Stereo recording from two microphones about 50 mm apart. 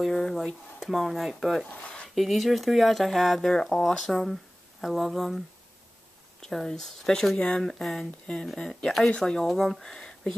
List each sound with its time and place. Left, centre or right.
0.0 s a sound: centre
0.5 s speech: centre
1.7 s speech: left
2.1 s speech: centre
6.4 s speech: centre
7.3 s speech: left
7.6 s speech: centre